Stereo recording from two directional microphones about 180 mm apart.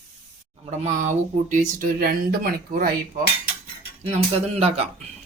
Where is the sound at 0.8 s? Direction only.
40° right (ahead or behind).